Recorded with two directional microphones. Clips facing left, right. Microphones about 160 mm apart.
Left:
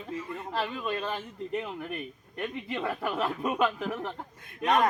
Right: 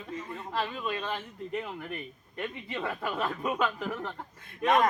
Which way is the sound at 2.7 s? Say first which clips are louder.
Left 2 dB; 20° left (ahead or behind).